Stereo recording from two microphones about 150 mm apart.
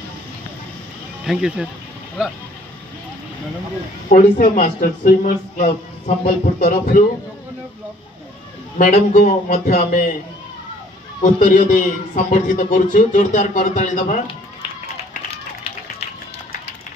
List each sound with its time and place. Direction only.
1.2 s speech: 5° right (ahead or behind)
4.1 s a man's voice: 60° left (ahead or behind)
8.7 s a man's voice: 60° left (ahead or behind)
11.1 s a man's voice: 60° left (ahead or behind)